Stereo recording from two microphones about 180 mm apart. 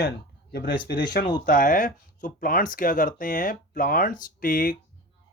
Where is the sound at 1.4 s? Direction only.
50° left (ahead or behind).